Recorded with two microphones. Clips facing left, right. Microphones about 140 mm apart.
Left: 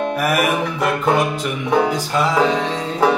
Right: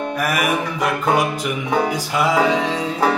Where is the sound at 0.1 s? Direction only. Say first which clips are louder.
Left 2 dB; centre (ahead or behind).